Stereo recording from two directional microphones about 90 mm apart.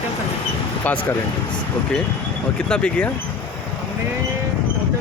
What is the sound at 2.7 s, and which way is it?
Speech, 15° left (ahead or behind).